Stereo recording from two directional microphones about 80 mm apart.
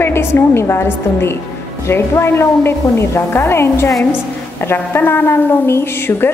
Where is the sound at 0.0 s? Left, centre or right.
Left.